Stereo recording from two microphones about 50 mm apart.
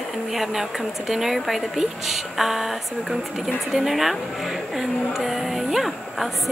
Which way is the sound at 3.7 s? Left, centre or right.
Centre.